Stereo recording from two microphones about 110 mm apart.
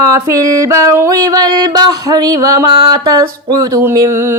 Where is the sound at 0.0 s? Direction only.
30° right (ahead or behind).